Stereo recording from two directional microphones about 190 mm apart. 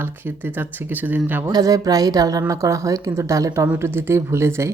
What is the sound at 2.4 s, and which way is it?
Speech, 15° right (ahead or behind).